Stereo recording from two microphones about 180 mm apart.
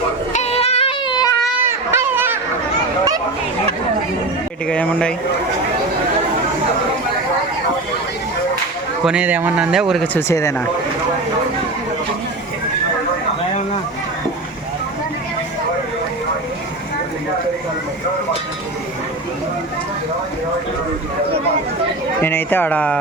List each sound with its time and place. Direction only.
0.3 s child singing: 35° left (ahead or behind)
1.6 s a sound: 15° right (ahead or behind)
4.7 s speech: 5° left (ahead or behind)
9.0 s speech: 5° right (ahead or behind)
10.2 s speech: 15° left (ahead or behind)
22.2 s speech: 10° left (ahead or behind)